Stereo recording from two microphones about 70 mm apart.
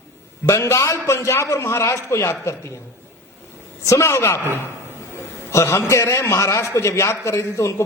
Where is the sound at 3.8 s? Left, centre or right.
Left.